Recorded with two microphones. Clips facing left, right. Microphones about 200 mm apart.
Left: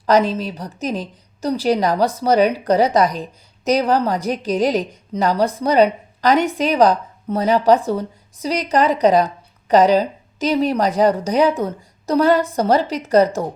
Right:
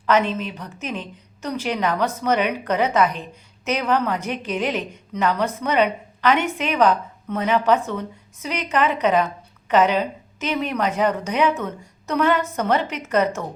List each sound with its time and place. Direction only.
0.0 s speech: 35° left (ahead or behind)